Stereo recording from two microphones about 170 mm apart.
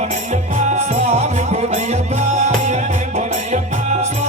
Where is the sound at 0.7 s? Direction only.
45° right (ahead or behind).